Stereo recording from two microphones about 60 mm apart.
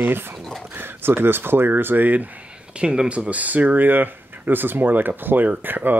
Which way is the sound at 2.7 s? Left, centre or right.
Centre.